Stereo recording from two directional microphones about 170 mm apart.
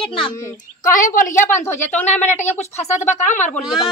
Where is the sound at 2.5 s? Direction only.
40° left (ahead or behind).